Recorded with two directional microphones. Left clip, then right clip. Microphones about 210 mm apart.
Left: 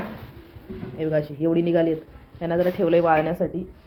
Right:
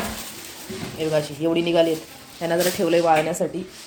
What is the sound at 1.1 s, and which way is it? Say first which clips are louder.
Speech: even; centre (ahead or behind).